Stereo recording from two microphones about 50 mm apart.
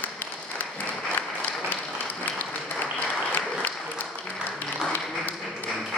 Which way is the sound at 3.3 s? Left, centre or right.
Left.